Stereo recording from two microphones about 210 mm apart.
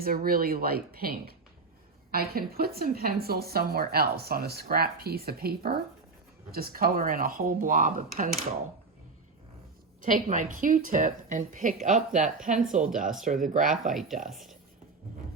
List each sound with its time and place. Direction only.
0.0 s a woman's voice: 45° right (ahead or behind)
10.0 s a woman's voice: 40° right (ahead or behind)
13.8 s speech: centre (ahead or behind)